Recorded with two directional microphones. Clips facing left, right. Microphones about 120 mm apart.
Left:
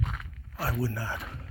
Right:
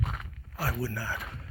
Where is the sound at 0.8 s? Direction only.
25° left (ahead or behind).